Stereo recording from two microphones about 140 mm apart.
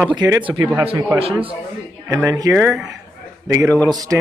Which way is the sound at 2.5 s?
Centre (ahead or behind).